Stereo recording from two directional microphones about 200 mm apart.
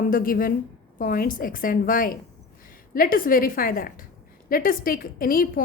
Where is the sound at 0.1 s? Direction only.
45° left (ahead or behind).